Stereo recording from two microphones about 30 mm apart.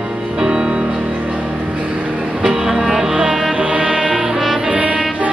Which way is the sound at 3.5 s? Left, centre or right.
Right.